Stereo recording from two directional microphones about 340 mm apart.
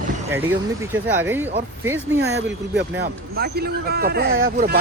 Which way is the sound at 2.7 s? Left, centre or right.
Right.